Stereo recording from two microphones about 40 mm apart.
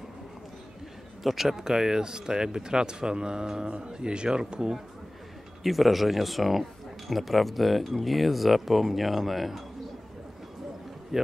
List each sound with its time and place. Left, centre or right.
1.2 s speech: centre
5.6 s speech: centre